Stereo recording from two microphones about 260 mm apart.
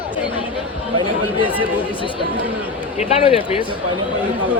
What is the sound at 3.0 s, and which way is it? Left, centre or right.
Speech, left.